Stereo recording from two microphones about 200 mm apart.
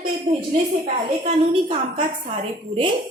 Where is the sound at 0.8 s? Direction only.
30° right (ahead or behind).